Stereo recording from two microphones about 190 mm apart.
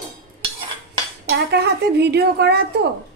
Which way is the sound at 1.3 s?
60° right (ahead or behind).